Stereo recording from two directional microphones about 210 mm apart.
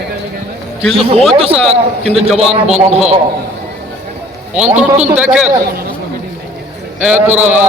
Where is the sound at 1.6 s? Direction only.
30° right (ahead or behind).